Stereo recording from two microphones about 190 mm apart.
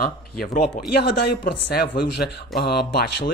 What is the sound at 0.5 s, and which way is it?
Speech, 50° left (ahead or behind).